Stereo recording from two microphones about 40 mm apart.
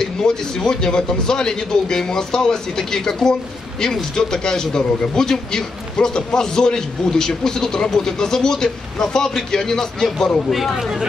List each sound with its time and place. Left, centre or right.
0.0 s a man's voice: centre
10.5 s speech: centre